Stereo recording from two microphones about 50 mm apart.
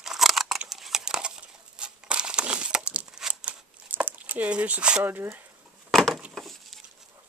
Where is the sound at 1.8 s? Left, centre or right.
Centre.